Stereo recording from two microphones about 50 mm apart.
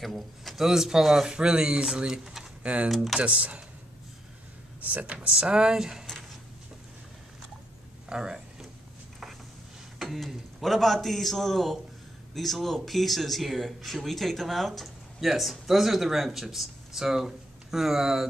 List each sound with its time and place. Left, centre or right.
0.0 s speech: centre
1.3 s speech: centre
2.6 s speech: right
2.9 s speech: centre
3.2 s speech: right
4.8 s speech: right; by 6.0 s centre
8.1 s a sound: centre
9.9 s speech: centre